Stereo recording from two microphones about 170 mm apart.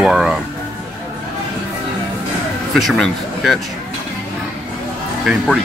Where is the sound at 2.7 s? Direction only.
Centre (ahead or behind).